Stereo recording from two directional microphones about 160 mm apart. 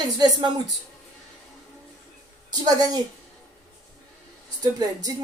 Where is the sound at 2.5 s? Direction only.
25° right (ahead or behind).